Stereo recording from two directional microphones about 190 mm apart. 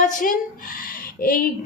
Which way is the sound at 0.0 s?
45° left (ahead or behind).